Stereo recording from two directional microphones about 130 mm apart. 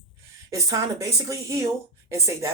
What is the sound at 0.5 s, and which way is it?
Speech, 25° right (ahead or behind).